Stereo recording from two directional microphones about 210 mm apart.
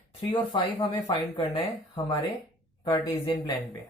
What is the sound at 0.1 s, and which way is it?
Speech, 20° left (ahead or behind).